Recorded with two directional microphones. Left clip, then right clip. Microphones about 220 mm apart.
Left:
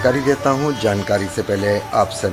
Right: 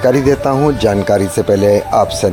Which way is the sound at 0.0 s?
30° right (ahead or behind).